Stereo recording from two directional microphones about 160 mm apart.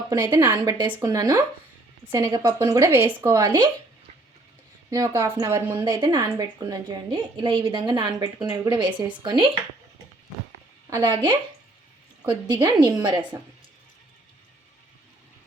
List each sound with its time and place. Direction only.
0.2 s speech: 15° right (ahead or behind)
0.6 s a woman's voice: 25° right (ahead or behind)
3.3 s a woman's voice: 25° right (ahead or behind)
4.9 s speech: 15° right (ahead or behind)
6.0 s a woman's voice: 30° right (ahead or behind)
10.8 s a woman's voice: 25° right (ahead or behind)